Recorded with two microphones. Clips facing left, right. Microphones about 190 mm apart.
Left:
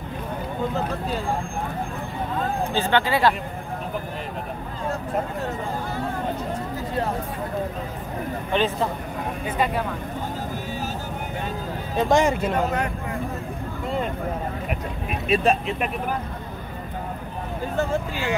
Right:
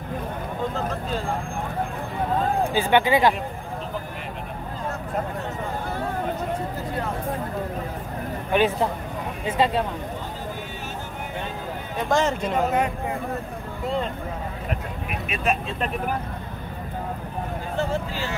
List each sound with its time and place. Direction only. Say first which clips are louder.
2.7 s speech: right 2 dB; 15° right (ahead or behind)
8.5 s speech: right 3 dB; 10° right (ahead or behind)
9.5 s speech: right 3 dB; 25° right (ahead or behind)
12.1 s speech: left 2 dB; 15° left (ahead or behind)
15.0 s speech: left 6 dB; 30° left (ahead or behind)